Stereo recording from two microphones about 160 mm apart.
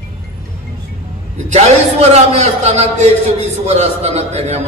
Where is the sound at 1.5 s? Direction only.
40° right (ahead or behind).